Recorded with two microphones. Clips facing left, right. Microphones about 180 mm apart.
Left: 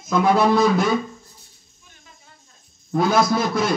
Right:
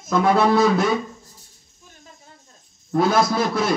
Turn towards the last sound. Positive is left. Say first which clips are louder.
# even
turn(degrees=-5)  # may be behind; listen again after turning